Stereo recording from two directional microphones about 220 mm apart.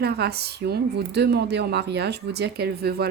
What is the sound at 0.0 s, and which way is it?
A woman's voice, 45° right (ahead or behind).